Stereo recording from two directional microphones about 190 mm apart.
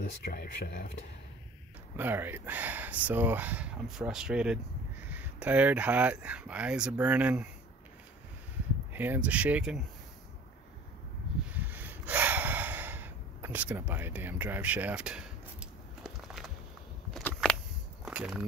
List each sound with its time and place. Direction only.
0.2 s speech: 50° left (ahead or behind)
2.0 s speech: 10° right (ahead or behind)
8.9 s speech: 10° right (ahead or behind)
11.4 s snort: 10° right (ahead or behind)
17.1 s a sound: 5° left (ahead or behind)
18.0 s walk: 5° right (ahead or behind)